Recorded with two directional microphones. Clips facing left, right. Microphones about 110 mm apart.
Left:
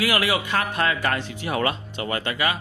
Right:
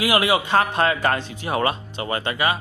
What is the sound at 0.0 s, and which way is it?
A man's voice, 20° right (ahead or behind).